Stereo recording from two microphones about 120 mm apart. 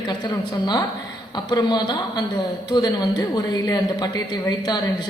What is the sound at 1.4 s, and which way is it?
Speech, 35° left (ahead or behind).